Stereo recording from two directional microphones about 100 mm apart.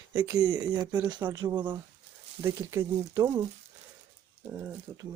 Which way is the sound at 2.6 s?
30° right (ahead or behind).